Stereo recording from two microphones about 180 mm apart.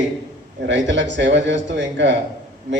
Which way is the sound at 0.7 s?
85° right.